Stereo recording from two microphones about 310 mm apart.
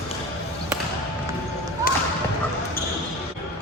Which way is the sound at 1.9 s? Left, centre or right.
Left.